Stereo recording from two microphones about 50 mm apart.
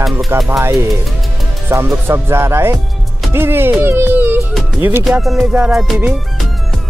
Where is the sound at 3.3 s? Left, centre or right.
Right.